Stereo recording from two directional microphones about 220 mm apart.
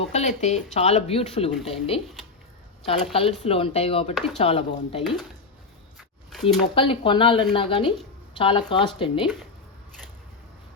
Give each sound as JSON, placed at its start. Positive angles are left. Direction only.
{"t": 0.0, "sound": "speech", "side_deg": 30}
{"t": 6.0, "sound": "a sound", "side_deg": 0}
{"t": 6.7, "sound": "speech", "side_deg": 25}